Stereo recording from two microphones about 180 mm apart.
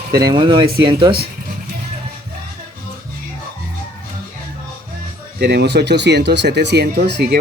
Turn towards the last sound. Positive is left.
turn(degrees=-60)  # may be behind; listen again after turning